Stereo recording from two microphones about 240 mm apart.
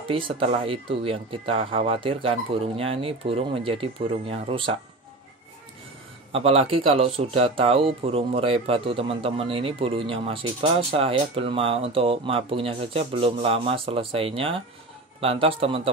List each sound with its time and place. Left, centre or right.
0.1 s speech: right
6.3 s speech: right